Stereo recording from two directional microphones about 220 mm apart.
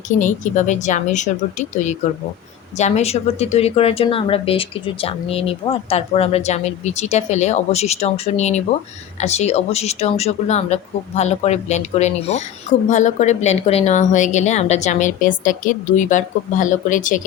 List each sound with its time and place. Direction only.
0.2 s a woman's voice: 35° left (ahead or behind)